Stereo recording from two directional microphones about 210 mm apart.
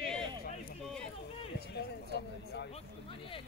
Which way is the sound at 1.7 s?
50° left (ahead or behind).